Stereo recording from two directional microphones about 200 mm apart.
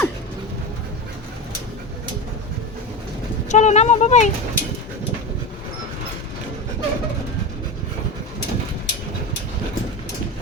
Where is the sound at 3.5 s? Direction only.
35° left (ahead or behind).